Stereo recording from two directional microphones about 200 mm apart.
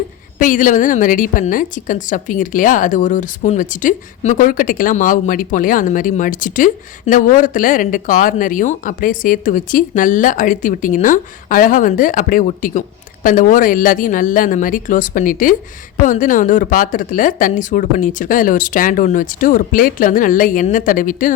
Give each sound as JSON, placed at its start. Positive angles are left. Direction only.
{"t": 0.3, "sound": "a woman's voice", "side_deg": 40}